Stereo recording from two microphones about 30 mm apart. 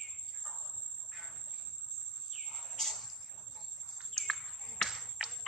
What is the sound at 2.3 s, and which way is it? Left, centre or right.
Bird, centre.